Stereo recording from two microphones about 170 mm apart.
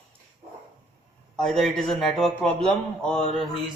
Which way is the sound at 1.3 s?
5° left (ahead or behind).